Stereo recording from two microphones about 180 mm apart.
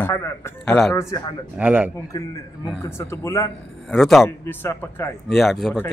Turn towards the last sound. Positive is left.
turn(degrees=0)  # may be behind; listen again after turning